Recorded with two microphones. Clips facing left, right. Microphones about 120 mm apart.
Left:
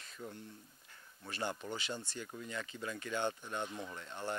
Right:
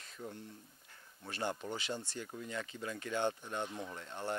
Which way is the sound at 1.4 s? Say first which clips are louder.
Right 1 dB; 25° right (ahead or behind).